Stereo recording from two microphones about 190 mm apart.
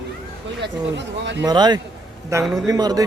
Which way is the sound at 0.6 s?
70° right (ahead or behind).